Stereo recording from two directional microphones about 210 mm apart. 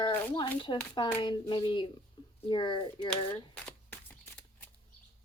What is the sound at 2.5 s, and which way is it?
Speech, 25° left (ahead or behind).